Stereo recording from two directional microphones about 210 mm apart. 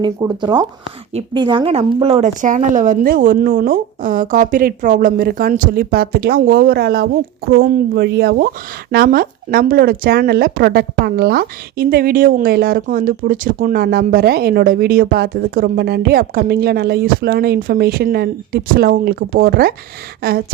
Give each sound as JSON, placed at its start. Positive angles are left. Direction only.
{"t": 0.0, "sound": "speech", "side_deg": -20}